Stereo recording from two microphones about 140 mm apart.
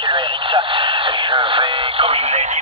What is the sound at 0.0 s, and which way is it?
Radio, 35° right (ahead or behind).